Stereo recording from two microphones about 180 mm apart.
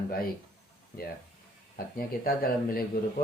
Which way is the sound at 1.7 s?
55° left (ahead or behind).